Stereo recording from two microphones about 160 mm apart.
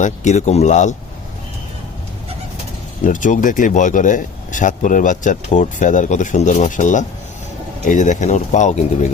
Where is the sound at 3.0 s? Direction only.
55° left (ahead or behind).